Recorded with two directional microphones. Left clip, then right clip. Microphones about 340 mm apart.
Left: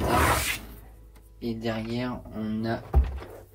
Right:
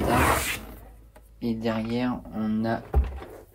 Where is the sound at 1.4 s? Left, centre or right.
Centre.